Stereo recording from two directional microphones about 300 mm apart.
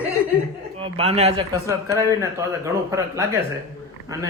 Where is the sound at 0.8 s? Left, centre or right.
Centre.